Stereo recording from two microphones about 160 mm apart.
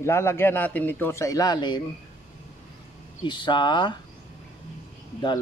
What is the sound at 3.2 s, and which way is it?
Speech, 30° left (ahead or behind).